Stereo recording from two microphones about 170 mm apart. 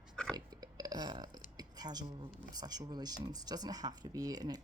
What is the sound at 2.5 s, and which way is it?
Speech, 25° right (ahead or behind).